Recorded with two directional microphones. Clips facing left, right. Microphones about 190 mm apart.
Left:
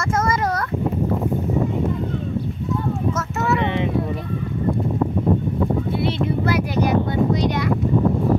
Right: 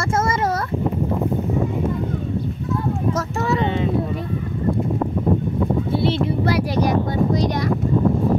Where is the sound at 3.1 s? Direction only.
30° right (ahead or behind).